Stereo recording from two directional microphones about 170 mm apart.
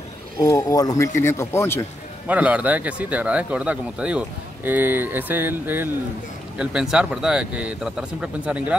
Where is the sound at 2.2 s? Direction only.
10° right (ahead or behind).